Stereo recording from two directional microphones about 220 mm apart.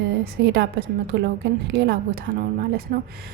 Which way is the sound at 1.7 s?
50° right (ahead or behind).